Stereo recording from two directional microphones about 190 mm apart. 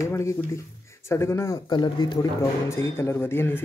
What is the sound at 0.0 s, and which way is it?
Speech, 15° left (ahead or behind).